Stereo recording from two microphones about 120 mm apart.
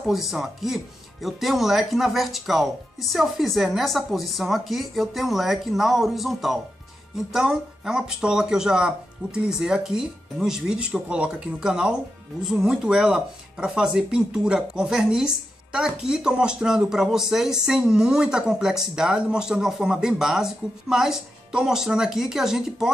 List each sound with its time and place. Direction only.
0.0 s speech: centre (ahead or behind)